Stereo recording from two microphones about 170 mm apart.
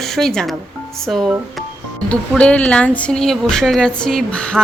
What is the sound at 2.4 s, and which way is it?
Speech, 5° left (ahead or behind).